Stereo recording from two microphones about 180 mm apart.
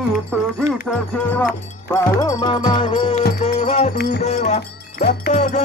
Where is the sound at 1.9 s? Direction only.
20° left (ahead or behind); by 3.9 s 40° left (ahead or behind).